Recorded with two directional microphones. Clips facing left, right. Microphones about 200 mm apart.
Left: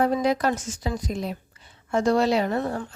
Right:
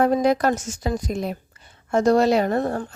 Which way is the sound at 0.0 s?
50° right (ahead or behind).